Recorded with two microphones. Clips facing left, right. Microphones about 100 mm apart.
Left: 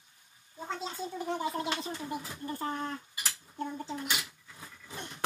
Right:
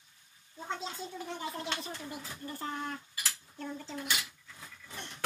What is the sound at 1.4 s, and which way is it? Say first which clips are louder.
Speech: left 5 dB; 15° left (ahead or behind).